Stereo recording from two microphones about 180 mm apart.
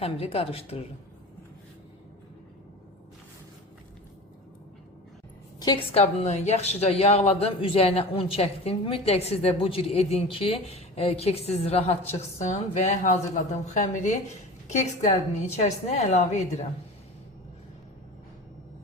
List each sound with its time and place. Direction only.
0.0 s a woman's voice: 35° left (ahead or behind)
5.5 s a woman's voice: 25° left (ahead or behind)